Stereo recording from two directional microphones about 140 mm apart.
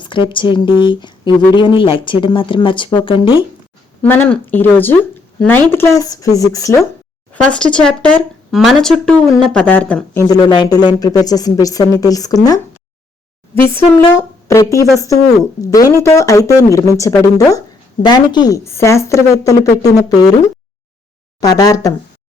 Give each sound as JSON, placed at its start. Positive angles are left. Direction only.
{"t": 0.0, "sound": "speech", "side_deg": 35}
{"t": 4.0, "sound": "speech", "side_deg": 15}
{"t": 7.4, "sound": "speech", "side_deg": 5}
{"t": 10.2, "sound": "speech", "side_deg": 30}
{"t": 13.6, "sound": "speech", "side_deg": 15}
{"t": 21.4, "sound": "speech", "side_deg": 25}